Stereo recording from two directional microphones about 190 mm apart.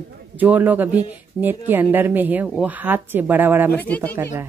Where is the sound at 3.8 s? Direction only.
10° left (ahead or behind).